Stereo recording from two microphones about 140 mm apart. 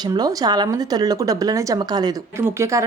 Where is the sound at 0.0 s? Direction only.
30° right (ahead or behind).